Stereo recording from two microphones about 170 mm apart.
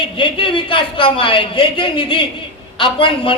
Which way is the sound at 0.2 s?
30° left (ahead or behind).